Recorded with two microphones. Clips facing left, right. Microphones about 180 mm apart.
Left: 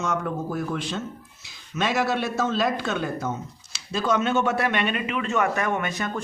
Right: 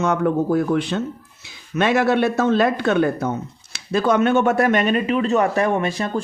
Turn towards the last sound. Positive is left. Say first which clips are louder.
# right 6 dB
turn(degrees=-30)  # may be behind; listen again after turning